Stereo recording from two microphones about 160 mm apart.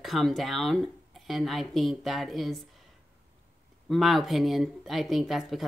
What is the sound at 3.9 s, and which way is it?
Speech, centre (ahead or behind).